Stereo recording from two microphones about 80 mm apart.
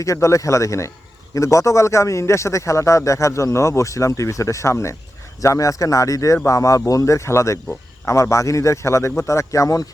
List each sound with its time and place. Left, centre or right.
0.0 s a man's voice: left